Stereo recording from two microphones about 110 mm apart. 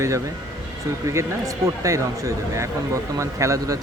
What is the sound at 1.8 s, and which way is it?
Speech, 30° right (ahead or behind).